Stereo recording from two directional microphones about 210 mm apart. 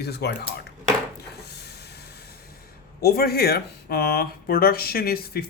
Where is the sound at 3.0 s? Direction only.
45° left (ahead or behind).